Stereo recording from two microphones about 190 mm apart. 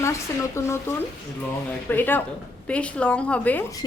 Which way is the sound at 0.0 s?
15° left (ahead or behind).